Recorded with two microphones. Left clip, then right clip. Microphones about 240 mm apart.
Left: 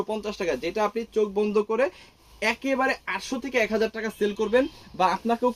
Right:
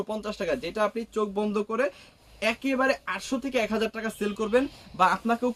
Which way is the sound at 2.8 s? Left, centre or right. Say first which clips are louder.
Even; right.